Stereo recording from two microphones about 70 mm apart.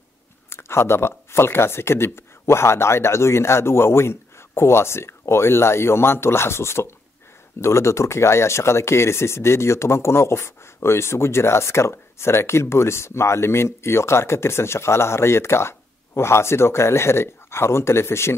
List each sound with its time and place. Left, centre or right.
0.5 s speech: left